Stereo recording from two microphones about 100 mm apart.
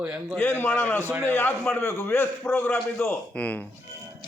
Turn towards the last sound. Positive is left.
turn(degrees=15)  # may be behind; listen again after turning